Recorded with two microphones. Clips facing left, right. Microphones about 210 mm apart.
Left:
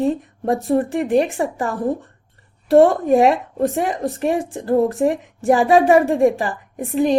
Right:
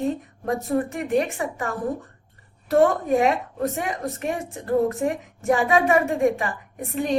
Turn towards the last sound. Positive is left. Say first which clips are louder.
# left 8 dB
turn(degrees=35)  # may be behind; listen again after turning